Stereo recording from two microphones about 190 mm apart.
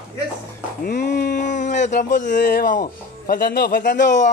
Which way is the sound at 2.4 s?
50° left (ahead or behind).